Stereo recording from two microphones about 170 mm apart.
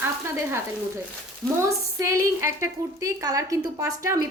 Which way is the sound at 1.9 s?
15° right (ahead or behind).